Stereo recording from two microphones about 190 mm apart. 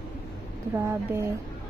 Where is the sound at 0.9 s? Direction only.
15° right (ahead or behind).